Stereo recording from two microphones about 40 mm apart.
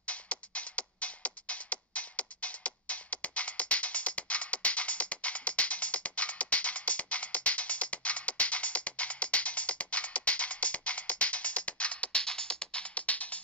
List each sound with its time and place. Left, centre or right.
0.0 s music: left